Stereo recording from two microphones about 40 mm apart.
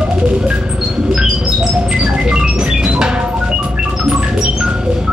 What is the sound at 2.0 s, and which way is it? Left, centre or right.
Music, centre.